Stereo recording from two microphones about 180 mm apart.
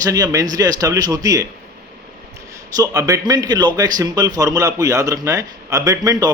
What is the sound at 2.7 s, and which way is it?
Speech, 20° right (ahead or behind).